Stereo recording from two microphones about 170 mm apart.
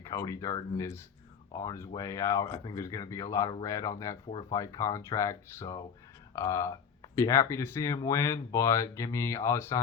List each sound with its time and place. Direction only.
0.0 s speech: 20° left (ahead or behind)